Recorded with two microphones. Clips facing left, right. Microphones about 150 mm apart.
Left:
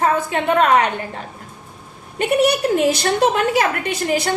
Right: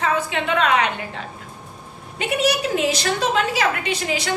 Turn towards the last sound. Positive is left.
turn(degrees=55)  # may be behind; listen again after turning